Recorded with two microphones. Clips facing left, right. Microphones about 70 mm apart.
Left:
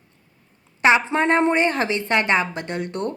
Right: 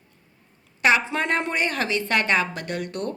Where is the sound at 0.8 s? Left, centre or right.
Left.